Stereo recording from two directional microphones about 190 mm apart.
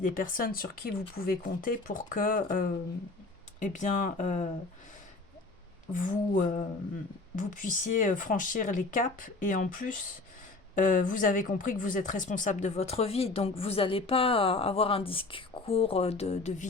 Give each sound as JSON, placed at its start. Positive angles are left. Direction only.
{"t": 0.0, "sound": "speech", "side_deg": 45}
{"t": 5.9, "sound": "speech", "side_deg": 45}